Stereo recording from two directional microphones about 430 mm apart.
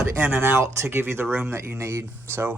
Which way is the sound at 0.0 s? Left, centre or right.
Centre.